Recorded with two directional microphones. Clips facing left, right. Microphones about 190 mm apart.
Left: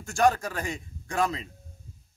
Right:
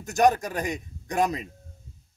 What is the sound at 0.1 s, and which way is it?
Speech, 20° right (ahead or behind).